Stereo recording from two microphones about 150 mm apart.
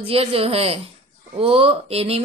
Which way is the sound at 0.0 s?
40° right (ahead or behind).